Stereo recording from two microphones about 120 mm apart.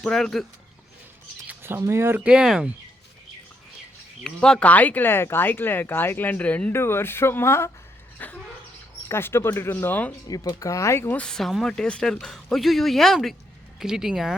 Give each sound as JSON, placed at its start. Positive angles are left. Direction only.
{"t": 0.0, "sound": "speech", "side_deg": 5}
{"t": 1.5, "sound": "speech", "side_deg": -20}
{"t": 4.2, "sound": "speech", "side_deg": 5}
{"t": 10.2, "sound": "speech", "side_deg": 30}
{"t": 11.2, "sound": "speech", "side_deg": 5}